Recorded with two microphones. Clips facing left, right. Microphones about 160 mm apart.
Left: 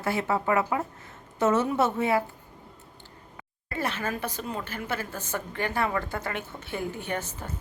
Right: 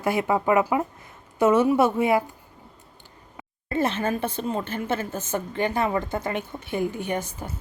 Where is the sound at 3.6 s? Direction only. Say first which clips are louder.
Right 6 dB; 25° right (ahead or behind).